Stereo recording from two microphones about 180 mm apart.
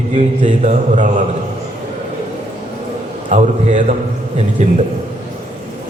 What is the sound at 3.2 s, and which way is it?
Speech, 40° right (ahead or behind).